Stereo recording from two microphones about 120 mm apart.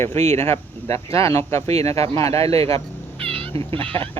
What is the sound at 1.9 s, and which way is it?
Speech, 55° right (ahead or behind).